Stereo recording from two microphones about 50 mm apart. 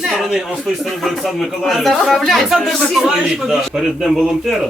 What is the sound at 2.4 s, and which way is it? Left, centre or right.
A man's voice, centre.